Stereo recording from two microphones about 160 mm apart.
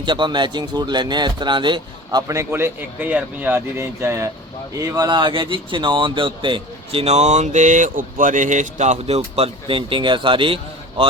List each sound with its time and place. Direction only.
0.0 s speech: 30° right (ahead or behind)